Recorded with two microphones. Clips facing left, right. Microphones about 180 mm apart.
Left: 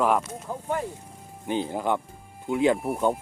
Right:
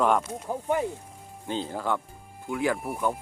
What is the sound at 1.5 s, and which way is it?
Speech, 15° left (ahead or behind).